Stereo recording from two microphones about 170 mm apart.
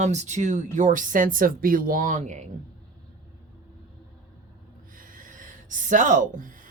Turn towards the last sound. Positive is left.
turn(degrees=-50)  # may be behind; listen again after turning